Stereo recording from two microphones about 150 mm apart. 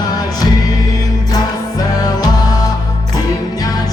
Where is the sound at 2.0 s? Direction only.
25° left (ahead or behind).